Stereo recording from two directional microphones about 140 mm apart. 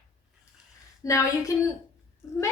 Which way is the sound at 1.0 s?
25° left (ahead or behind).